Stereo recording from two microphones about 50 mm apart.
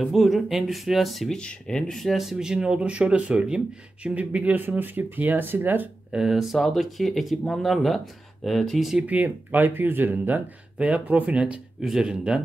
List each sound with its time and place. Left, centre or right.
0.0 s speech: centre
1.3 s speech: centre
2.0 s speech: centre
2.3 s speech: centre; by 5.9 s right
6.1 s speech: centre
9.0 s speech: right
11.8 s speech: centre